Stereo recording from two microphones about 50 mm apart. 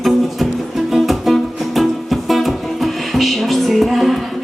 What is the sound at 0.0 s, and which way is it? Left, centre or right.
Music, centre.